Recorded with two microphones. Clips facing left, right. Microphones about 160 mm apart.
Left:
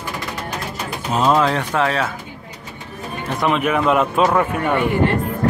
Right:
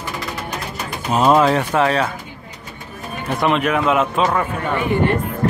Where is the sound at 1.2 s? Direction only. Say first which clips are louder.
Right 3 dB; 10° right (ahead or behind).